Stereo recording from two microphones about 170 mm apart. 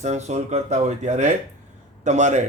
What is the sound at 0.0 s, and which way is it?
Speech, 40° right (ahead or behind).